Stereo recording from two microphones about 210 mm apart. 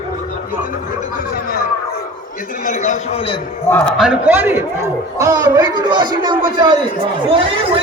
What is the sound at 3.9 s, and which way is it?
A man's voice, 5° right (ahead or behind).